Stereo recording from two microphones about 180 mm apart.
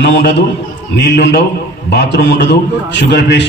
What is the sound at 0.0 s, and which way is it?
A man's voice, 70° left (ahead or behind).